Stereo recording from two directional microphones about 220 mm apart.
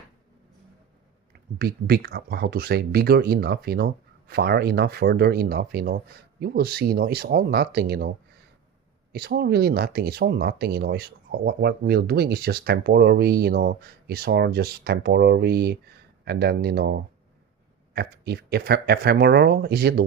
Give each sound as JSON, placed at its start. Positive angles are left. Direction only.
{"t": 1.3, "sound": "speech", "side_deg": -45}
{"t": 9.1, "sound": "speech", "side_deg": -45}